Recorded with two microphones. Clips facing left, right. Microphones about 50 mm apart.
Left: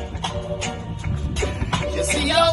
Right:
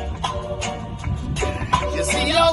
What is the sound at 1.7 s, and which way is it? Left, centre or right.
Music, centre.